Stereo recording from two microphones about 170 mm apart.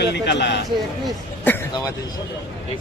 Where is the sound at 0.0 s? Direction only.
85° left.